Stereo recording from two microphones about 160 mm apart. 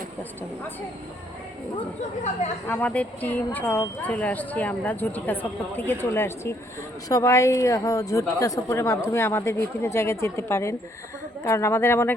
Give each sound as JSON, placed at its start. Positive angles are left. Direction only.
{"t": 2.6, "sound": "a woman's voice", "side_deg": 10}